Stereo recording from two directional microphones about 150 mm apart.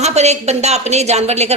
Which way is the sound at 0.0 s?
45° right (ahead or behind).